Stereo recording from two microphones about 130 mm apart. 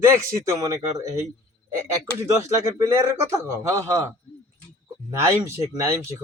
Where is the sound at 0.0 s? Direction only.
20° right (ahead or behind).